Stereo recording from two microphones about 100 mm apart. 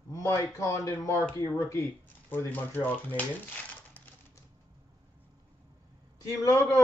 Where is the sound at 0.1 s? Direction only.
30° left (ahead or behind).